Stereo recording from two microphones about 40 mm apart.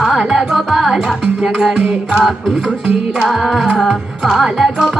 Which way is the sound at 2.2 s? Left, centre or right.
Centre.